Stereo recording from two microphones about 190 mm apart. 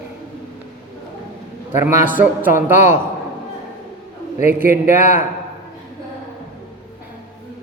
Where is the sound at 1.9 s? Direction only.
40° left (ahead or behind).